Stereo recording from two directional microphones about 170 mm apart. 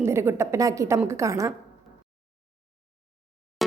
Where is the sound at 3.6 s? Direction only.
Centre (ahead or behind).